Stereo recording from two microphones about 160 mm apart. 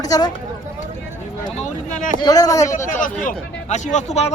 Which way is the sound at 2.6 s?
50° left (ahead or behind).